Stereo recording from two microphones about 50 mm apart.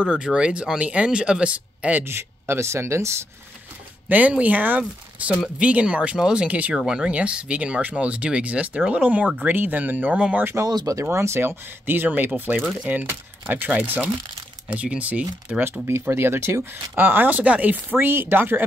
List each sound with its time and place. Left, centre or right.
0.0 s speech: centre
2.0 s speech: right
4.1 s speech: right
6.7 s speech: centre
7.1 s speech: right
9.4 s speech: right
10.6 s speech: right
11.8 s speech: right
12.6 s speech: centre
13.1 s speech: right
14.7 s speech: right
15.9 s speech: right
16.9 s speech: right
17.9 s speech: right